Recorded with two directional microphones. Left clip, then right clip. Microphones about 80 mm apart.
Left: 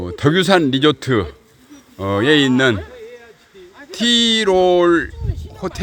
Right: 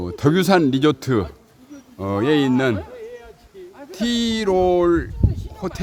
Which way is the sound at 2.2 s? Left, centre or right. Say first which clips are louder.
Left 5 dB; left.